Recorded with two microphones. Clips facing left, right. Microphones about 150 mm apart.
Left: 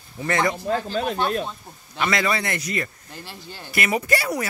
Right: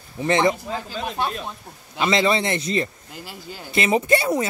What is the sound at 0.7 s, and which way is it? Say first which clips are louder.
Speech: left 5 dB; 50° left (ahead or behind).